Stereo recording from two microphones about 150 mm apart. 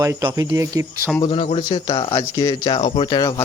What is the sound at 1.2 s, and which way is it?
Speech, 35° left (ahead or behind).